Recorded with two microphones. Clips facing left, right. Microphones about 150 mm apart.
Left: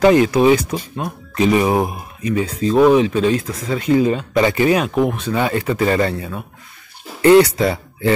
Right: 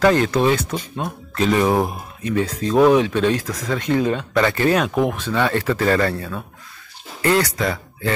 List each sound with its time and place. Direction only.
0.0 s speech: 15° left (ahead or behind)
5.3 s speech: 10° left (ahead or behind); by 8.1 s 30° left (ahead or behind)